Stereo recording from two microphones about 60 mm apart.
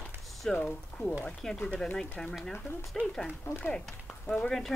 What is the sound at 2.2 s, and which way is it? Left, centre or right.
Speech, centre.